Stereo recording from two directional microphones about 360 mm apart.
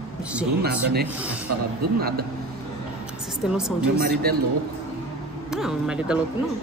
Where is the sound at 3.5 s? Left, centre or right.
Centre.